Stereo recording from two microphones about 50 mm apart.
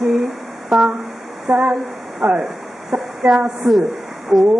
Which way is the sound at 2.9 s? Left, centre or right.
Centre.